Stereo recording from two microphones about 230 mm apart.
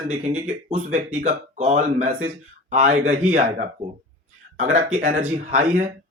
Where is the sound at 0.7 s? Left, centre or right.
Right.